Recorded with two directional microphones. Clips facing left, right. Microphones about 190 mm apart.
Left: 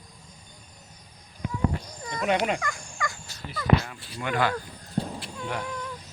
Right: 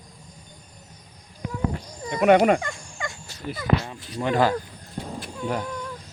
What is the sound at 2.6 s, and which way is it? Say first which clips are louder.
Fowl: even; 25° right (ahead or behind).